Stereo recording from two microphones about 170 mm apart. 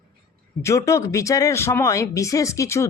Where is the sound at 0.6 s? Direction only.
15° left (ahead or behind).